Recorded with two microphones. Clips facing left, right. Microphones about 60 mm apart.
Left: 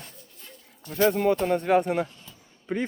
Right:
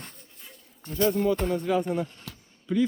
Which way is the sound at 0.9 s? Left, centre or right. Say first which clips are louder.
Left 2 dB; left.